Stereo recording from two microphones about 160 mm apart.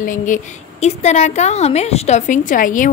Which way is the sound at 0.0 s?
55° left (ahead or behind).